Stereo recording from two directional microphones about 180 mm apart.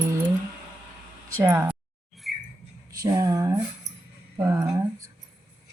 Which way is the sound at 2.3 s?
Centre (ahead or behind).